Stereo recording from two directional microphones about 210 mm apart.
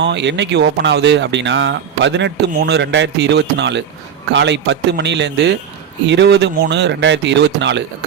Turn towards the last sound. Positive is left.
turn(degrees=-55)  # may be behind; listen again after turning